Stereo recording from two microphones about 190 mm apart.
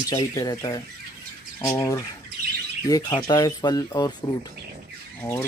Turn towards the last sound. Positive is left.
turn(degrees=10)  # may be behind; listen again after turning